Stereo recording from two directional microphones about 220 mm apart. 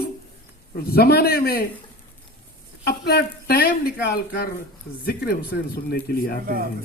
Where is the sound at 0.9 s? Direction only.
45° left (ahead or behind).